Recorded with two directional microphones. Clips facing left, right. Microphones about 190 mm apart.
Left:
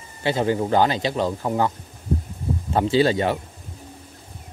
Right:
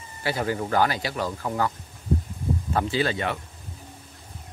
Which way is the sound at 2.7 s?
25° left (ahead or behind).